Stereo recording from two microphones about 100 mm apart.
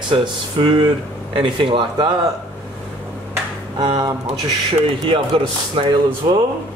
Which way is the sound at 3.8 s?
45° right (ahead or behind).